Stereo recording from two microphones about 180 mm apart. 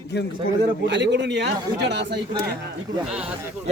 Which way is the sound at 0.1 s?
65° left (ahead or behind).